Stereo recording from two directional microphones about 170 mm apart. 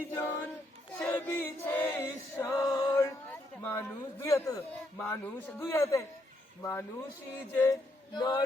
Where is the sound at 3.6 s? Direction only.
15° left (ahead or behind).